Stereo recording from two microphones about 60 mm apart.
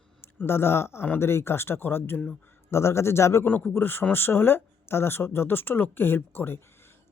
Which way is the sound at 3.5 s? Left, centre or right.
Left.